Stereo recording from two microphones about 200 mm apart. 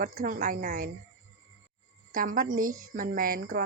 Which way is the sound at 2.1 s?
45° right (ahead or behind).